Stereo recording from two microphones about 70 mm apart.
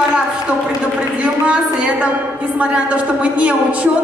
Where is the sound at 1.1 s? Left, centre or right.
Centre.